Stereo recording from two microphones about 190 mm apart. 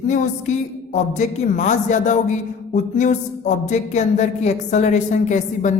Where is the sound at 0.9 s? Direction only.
40° left (ahead or behind).